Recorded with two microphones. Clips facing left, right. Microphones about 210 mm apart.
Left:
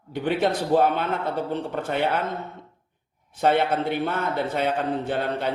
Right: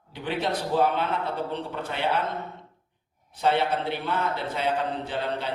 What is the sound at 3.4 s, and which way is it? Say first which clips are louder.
A man's voice: left 3 dB; 55° left (ahead or behind).